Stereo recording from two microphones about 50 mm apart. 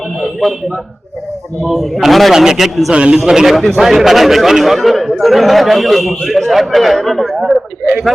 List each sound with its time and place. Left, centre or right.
0.2 s a sound: centre
1.6 s speech: centre
2.9 s a man's voice: right
3.2 s a man's voice: centre